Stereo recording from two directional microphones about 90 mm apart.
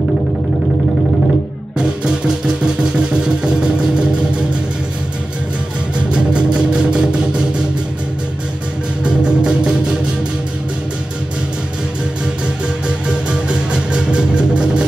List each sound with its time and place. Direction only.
1.8 s music: 10° right (ahead or behind)
6.1 s music: 10° right (ahead or behind)
9.0 s music: 10° right (ahead or behind)
12.8 s music: 10° right (ahead or behind)